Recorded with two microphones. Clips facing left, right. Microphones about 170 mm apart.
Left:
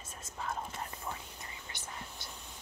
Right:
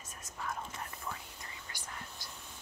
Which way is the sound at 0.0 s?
30° left (ahead or behind).